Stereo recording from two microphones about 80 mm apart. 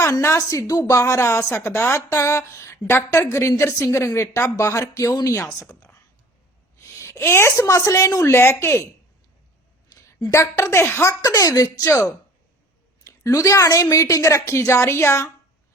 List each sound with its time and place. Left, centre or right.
0.0 s speech: left
6.7 s speech: left
10.3 s speech: left
11.2 s speech: left
13.1 s a woman's voice: left